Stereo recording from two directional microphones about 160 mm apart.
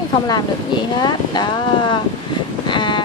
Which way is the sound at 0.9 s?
25° left (ahead or behind).